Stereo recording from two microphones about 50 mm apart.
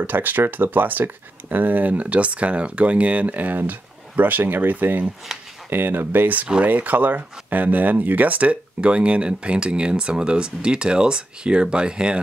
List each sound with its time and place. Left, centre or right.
0.0 s speech: right; by 12.2 s centre